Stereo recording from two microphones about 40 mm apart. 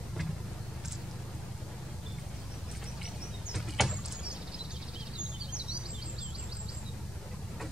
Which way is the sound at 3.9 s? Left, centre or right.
Right.